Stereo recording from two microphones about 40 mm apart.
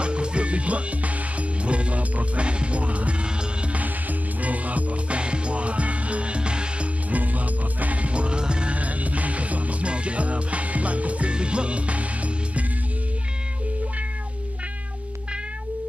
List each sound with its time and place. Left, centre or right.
0.0 s music: right
7.1 s music: right
8.7 s music: right